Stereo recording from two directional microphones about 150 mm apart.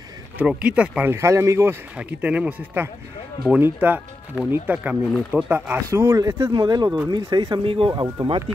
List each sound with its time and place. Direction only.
0.4 s speech: 10° right (ahead or behind); by 8.4 s 30° right (ahead or behind)